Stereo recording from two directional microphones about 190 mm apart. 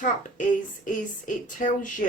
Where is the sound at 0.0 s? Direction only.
45° left (ahead or behind).